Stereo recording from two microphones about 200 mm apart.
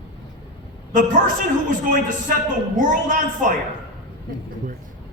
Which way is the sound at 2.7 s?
40° right (ahead or behind).